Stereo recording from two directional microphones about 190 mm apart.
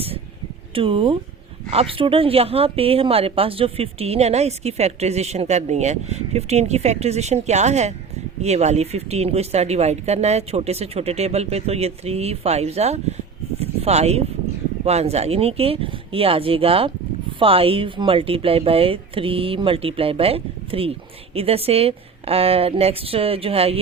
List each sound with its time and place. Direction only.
0.7 s speech: 30° right (ahead or behind)
13.6 s a sound: 35° right (ahead or behind)
14.8 s speech: 35° right (ahead or behind)